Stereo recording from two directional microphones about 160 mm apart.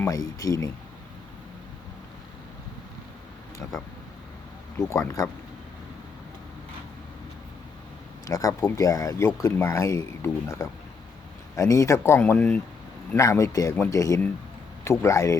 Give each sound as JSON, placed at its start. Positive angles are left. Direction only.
{"t": 0.0, "sound": "speech", "side_deg": 20}
{"t": 4.9, "sound": "speech", "side_deg": 20}
{"t": 8.3, "sound": "speech", "side_deg": 20}